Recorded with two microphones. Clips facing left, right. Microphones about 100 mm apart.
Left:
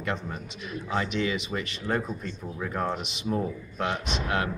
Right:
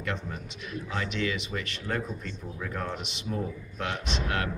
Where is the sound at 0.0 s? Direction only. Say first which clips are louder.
Left 2 dB; 25° left (ahead or behind).